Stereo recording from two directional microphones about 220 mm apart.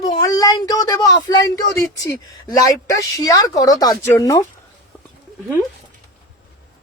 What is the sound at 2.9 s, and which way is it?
A man's voice, 15° left (ahead or behind).